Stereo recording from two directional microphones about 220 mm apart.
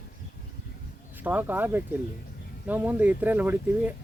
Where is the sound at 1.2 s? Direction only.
10° right (ahead or behind).